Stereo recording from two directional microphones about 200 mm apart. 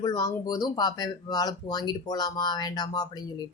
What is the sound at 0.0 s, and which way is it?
Speech, 20° left (ahead or behind).